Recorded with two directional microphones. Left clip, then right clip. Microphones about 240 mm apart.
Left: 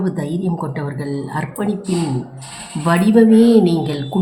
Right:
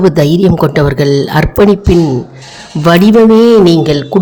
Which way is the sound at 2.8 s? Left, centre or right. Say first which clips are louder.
Right 8 dB; right.